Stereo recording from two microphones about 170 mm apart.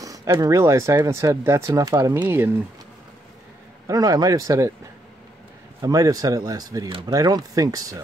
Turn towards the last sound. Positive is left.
turn(degrees=-20)  # may be behind; listen again after turning